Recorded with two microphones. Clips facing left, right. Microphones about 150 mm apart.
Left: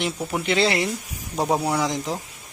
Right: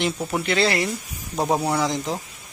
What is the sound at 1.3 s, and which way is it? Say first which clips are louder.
Speech: even; centre (ahead or behind).